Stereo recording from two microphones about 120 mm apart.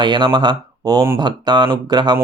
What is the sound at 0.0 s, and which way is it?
Speech, 40° right (ahead or behind).